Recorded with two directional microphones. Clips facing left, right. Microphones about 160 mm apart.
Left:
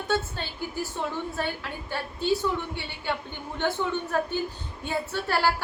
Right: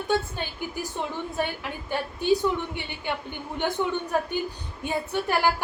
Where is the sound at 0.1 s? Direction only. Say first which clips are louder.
Right 2 dB; 15° right (ahead or behind).